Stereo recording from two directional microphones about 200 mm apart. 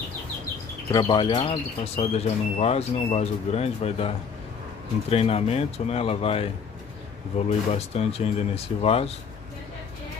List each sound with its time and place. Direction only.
0.9 s speech: 20° left (ahead or behind)
5.1 s speech: 30° left (ahead or behind)